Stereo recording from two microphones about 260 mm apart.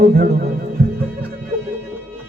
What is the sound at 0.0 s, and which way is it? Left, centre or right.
Speech, right.